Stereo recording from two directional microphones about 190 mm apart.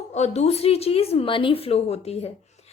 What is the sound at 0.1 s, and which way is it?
A woman's voice, 35° left (ahead or behind).